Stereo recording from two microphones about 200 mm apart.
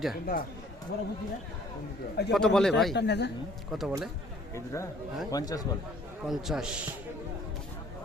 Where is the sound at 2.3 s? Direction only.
5° left (ahead or behind).